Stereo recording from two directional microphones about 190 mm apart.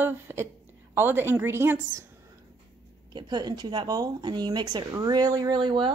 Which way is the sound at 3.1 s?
25° right (ahead or behind).